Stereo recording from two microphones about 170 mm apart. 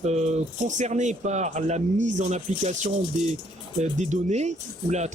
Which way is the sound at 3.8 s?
45° right (ahead or behind).